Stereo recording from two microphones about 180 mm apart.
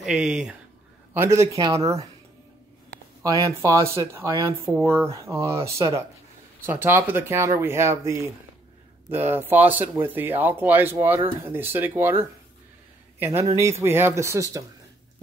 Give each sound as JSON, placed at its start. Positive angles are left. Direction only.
{"t": 0.0, "sound": "speech", "side_deg": -5}
{"t": 3.3, "sound": "speech", "side_deg": -20}
{"t": 13.2, "sound": "speech", "side_deg": -15}